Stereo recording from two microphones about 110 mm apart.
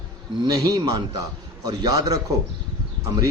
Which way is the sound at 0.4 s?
30° right (ahead or behind).